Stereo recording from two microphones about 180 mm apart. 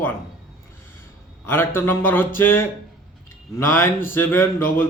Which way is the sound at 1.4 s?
10° left (ahead or behind).